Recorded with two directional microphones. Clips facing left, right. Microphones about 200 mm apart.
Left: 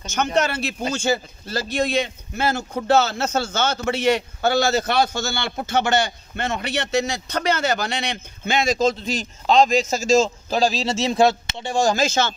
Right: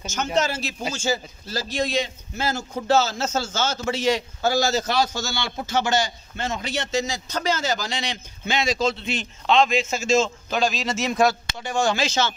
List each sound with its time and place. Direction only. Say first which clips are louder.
0.0 s a man's voice: left 2 dB; 60° left (ahead or behind)